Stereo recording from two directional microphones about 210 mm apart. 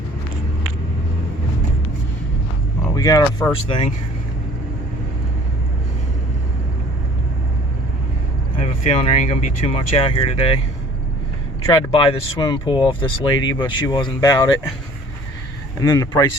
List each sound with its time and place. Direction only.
2.9 s speech: 15° left (ahead or behind)
8.8 s speech: 30° left (ahead or behind)
11.6 s speech: 20° left (ahead or behind)
15.8 s speech: 15° left (ahead or behind)